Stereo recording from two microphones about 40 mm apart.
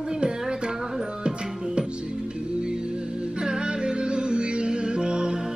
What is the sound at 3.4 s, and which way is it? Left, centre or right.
Music, right.